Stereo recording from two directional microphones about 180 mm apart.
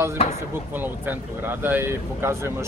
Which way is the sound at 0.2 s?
30° left (ahead or behind).